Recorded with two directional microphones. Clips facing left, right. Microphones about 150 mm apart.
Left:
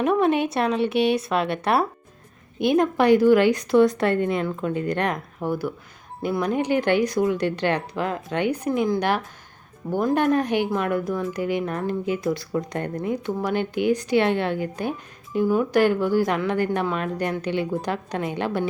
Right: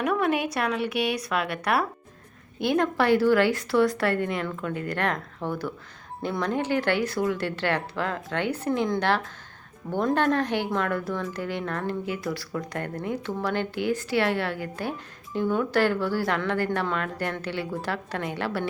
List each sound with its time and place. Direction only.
0.0 s a woman's voice: 25° left (ahead or behind)